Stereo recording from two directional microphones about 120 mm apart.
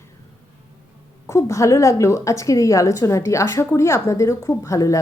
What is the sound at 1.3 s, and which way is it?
A woman's voice, 25° left (ahead or behind).